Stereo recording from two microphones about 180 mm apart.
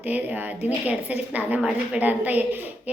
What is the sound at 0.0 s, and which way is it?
A woman's voice, 10° right (ahead or behind).